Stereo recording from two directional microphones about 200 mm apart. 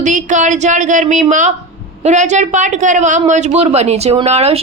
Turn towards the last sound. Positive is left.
turn(degrees=-30)  # may be behind; listen again after turning